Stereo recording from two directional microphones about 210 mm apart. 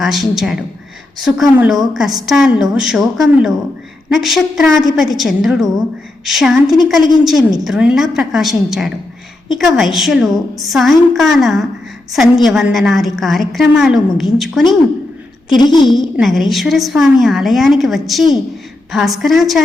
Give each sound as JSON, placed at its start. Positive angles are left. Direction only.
{"t": 0.0, "sound": "a woman's voice", "side_deg": 0}
{"t": 15.5, "sound": "a woman's voice", "side_deg": 20}
{"t": 15.9, "sound": "a woman's voice", "side_deg": 0}